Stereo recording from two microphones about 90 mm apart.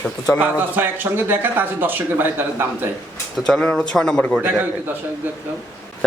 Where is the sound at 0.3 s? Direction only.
20° right (ahead or behind).